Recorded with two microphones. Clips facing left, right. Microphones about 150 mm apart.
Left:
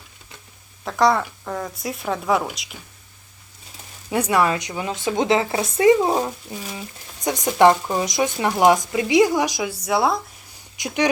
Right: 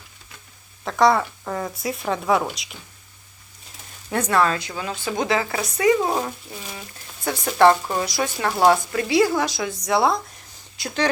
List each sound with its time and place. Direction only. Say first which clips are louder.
0.9 s speech: right 1 dB; centre (ahead or behind)
4.1 s speech: left 1 dB; 10° left (ahead or behind)
10.8 s speech: left 2 dB; 15° left (ahead or behind)